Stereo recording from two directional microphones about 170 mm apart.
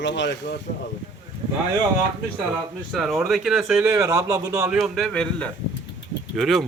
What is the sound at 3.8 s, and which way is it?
Speech, 20° right (ahead or behind).